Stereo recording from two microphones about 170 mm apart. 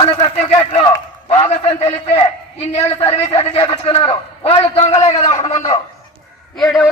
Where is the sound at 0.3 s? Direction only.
40° left (ahead or behind).